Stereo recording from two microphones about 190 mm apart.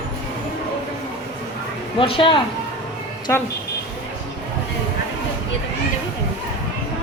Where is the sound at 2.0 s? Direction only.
25° left (ahead or behind).